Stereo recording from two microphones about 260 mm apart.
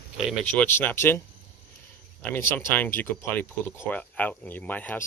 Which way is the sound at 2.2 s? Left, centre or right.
Centre.